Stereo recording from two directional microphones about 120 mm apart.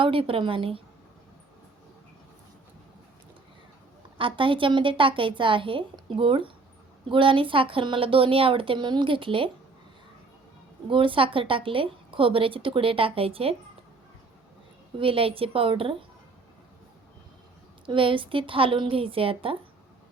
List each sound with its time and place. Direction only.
0.0 s a woman's voice: 50° right (ahead or behind)
4.2 s a woman's voice: 45° right (ahead or behind)
10.8 s a woman's voice: 45° right (ahead or behind)
14.9 s a woman's voice: 50° right (ahead or behind)
17.8 s a woman's voice: 45° right (ahead or behind)